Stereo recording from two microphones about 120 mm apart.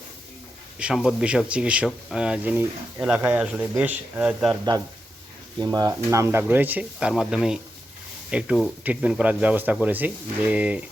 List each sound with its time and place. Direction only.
0.8 s speech: 5° right (ahead or behind)
5.5 s speech: 30° right (ahead or behind); by 10.8 s 10° right (ahead or behind)